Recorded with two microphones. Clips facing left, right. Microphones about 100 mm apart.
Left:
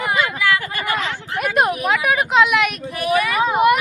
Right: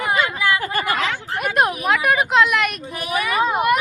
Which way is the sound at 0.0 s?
20° right (ahead or behind).